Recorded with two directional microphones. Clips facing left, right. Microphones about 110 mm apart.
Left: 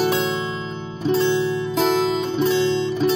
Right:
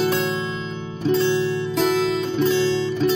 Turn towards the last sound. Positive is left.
turn(degrees=20)  # may be behind; listen again after turning